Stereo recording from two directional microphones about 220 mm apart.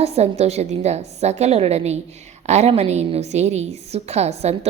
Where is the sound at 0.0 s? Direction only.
30° right (ahead or behind).